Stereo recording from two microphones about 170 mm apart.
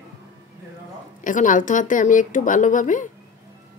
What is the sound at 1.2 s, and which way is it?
A woman's voice, 50° left (ahead or behind).